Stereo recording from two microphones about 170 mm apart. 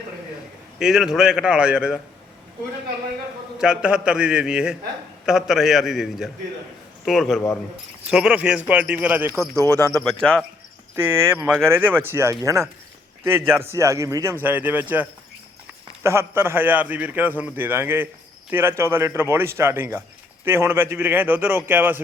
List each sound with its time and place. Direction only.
0.8 s a man's voice: centre (ahead or behind)
3.6 s a man's voice: 5° right (ahead or behind)
9.7 s a man's voice: 10° left (ahead or behind)
10.9 s a man's voice: 15° right (ahead or behind)
16.0 s a man's voice: 15° right (ahead or behind)